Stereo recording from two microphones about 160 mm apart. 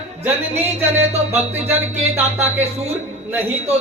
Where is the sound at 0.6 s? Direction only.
10° right (ahead or behind).